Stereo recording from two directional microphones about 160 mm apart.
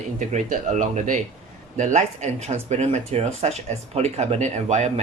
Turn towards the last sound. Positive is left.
turn(degrees=-45)  # may be behind; listen again after turning